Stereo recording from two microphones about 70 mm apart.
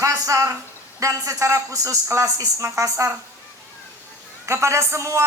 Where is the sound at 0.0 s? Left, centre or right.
Right.